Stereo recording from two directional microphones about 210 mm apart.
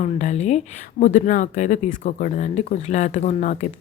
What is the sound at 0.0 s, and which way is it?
A woman's voice, 35° left (ahead or behind).